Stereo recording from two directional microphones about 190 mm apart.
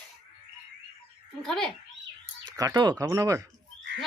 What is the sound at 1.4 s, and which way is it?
Speech, 5° left (ahead or behind).